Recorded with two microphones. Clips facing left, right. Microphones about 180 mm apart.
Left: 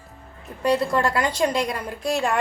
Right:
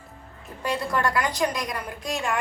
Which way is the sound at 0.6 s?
25° left (ahead or behind).